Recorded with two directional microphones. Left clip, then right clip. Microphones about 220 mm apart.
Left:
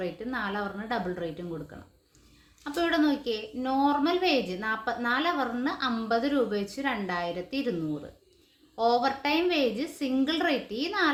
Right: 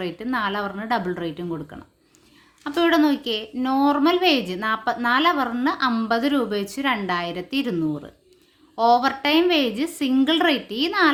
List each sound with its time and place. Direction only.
0.0 s a woman's voice: 40° right (ahead or behind)
2.6 s a woman's voice: 35° right (ahead or behind)